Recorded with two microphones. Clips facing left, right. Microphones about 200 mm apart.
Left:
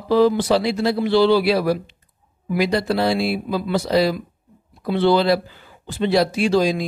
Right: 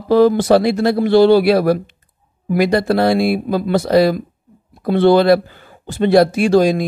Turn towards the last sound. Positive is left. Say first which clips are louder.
# right 5 dB
turn(degrees=-50)  # may be behind; listen again after turning